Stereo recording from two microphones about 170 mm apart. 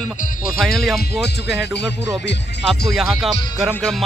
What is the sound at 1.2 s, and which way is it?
Speech, 85° left.